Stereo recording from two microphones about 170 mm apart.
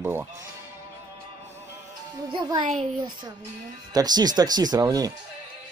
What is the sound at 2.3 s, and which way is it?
Speech, 25° right (ahead or behind).